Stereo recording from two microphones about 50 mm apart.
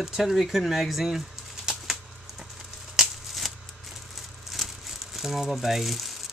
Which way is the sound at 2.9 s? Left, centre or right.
Centre.